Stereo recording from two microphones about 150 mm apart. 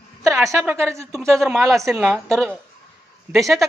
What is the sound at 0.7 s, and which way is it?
Speech, 15° right (ahead or behind).